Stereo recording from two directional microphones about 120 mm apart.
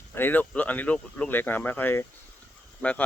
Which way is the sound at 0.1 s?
15° left (ahead or behind).